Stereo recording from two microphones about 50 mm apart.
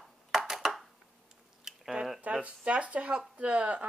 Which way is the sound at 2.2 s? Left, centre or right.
Right.